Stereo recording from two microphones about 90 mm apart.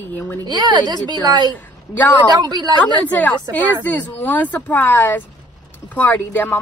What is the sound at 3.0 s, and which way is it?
A woman's voice, 20° left (ahead or behind).